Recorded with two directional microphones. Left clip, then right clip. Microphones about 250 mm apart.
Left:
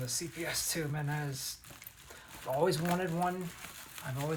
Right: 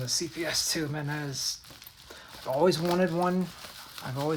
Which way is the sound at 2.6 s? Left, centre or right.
Right.